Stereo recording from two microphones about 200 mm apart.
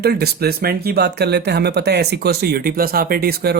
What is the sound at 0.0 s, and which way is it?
Speech, 55° right (ahead or behind).